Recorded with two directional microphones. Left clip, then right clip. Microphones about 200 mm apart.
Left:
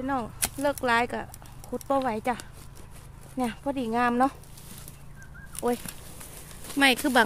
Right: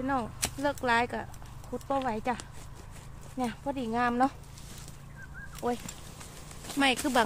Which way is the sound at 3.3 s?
50° left (ahead or behind).